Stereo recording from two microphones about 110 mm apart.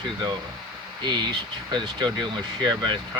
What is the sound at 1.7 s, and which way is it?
Speech, 40° right (ahead or behind).